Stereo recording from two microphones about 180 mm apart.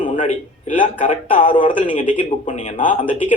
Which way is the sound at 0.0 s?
45° left (ahead or behind).